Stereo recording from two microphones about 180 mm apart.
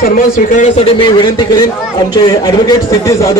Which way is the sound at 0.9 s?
25° left (ahead or behind).